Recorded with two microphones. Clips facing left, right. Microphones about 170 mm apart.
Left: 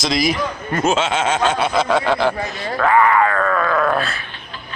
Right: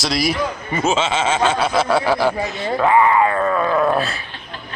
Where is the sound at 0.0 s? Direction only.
5° right (ahead or behind).